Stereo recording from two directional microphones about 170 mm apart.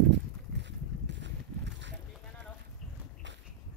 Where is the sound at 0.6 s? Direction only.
90° right.